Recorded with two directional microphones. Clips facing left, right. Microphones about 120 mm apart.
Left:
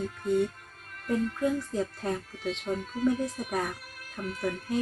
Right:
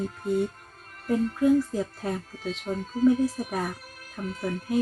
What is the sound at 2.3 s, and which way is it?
Speech, 40° right (ahead or behind).